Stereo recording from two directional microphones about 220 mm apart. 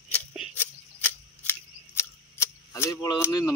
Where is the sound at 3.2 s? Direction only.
15° left (ahead or behind).